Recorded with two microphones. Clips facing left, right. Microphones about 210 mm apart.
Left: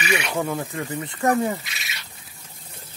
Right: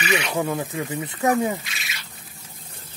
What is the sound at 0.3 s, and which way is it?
Speech, 5° right (ahead or behind).